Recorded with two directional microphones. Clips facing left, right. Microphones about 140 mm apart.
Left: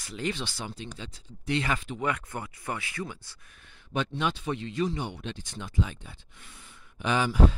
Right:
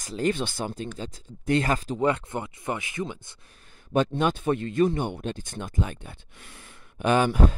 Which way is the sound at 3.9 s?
45° right (ahead or behind).